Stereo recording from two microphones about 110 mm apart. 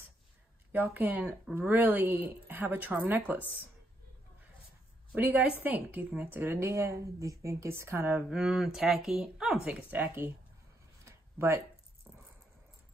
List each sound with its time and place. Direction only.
0.7 s a woman's voice: 15° right (ahead or behind)
5.1 s a woman's voice: 15° right (ahead or behind)
11.1 s a sound: 20° right (ahead or behind)